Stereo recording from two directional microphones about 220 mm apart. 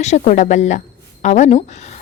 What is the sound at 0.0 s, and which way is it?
A woman's voice, 30° left (ahead or behind).